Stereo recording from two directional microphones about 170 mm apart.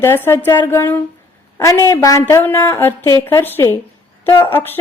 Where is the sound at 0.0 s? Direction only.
15° left (ahead or behind).